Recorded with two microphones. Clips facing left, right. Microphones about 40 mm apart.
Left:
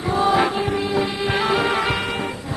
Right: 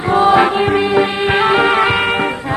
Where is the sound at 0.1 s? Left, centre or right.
Right.